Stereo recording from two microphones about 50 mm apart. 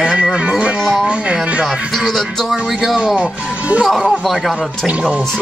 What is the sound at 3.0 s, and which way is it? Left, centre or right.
Speech, centre.